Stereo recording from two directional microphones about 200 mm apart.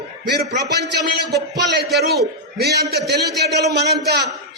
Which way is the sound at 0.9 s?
55° right (ahead or behind).